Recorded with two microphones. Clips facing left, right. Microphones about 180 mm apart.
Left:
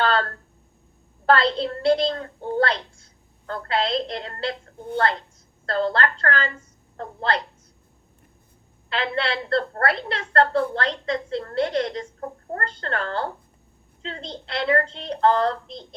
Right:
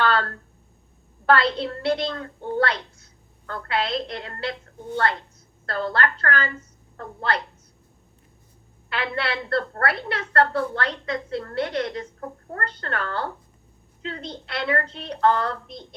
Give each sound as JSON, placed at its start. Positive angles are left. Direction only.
{"t": 0.0, "sound": "a sound", "side_deg": 30}
{"t": 1.2, "sound": "a woman's voice", "side_deg": 30}
{"t": 8.9, "sound": "a woman's voice", "side_deg": 25}